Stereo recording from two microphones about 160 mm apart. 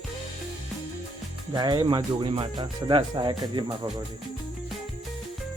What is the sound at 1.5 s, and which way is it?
Speech, 25° right (ahead or behind).